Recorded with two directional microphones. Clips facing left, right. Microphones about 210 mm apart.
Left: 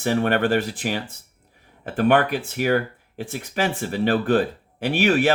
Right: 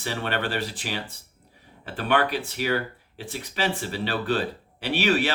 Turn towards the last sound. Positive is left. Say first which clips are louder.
# left 4 dB
turn(degrees=50)  # may be behind; listen again after turning